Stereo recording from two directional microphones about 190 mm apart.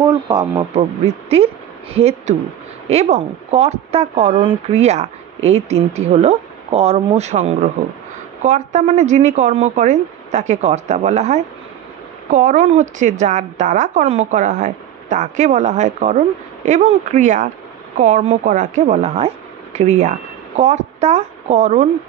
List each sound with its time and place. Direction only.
0.0 s a woman's voice: 20° right (ahead or behind)